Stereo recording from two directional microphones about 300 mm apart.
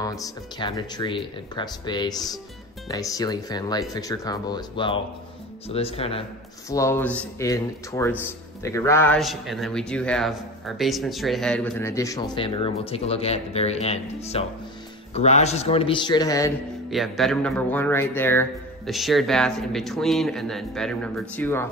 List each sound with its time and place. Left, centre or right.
0.0 s a man's voice: centre
16.9 s speech: centre